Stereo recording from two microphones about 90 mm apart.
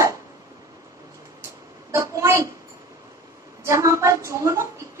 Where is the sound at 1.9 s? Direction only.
35° right (ahead or behind).